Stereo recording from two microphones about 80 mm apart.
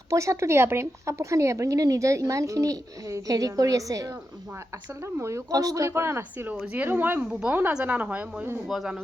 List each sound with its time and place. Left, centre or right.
0.1 s speech: right
5.1 s a woman's voice: right
7.3 s a woman's voice: centre
8.7 s speech: centre